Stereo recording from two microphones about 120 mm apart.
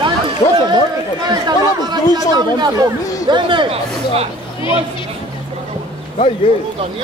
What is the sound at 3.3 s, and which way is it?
Speech, 45° right (ahead or behind).